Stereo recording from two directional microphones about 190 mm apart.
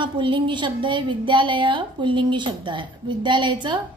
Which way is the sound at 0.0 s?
25° right (ahead or behind).